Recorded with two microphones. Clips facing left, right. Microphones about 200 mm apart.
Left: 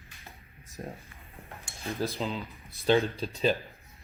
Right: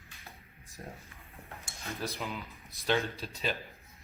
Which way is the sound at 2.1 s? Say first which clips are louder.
Left 6 dB; 30° left (ahead or behind).